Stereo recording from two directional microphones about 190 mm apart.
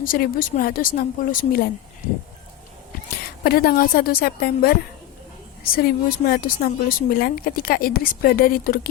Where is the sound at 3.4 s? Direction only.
50° left (ahead or behind).